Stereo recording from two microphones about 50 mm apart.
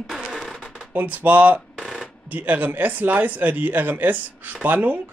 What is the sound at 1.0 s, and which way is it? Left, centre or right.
Speech, right.